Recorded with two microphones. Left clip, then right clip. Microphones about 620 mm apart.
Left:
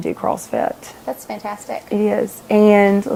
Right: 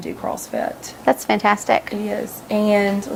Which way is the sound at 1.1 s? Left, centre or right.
Right.